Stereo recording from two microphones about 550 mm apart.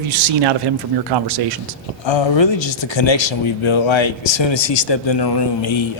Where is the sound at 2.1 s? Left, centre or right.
Left.